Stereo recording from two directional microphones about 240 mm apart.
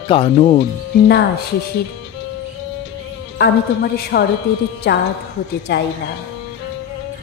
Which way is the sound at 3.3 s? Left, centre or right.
Left.